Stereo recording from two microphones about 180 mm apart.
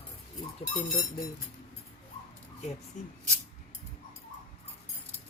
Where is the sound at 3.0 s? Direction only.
45° left (ahead or behind).